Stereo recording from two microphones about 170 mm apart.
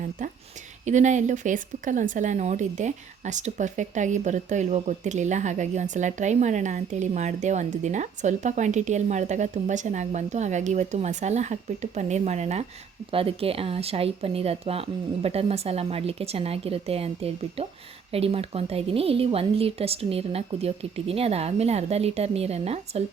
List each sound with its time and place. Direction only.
0.2 s a woman's voice: 50° right (ahead or behind)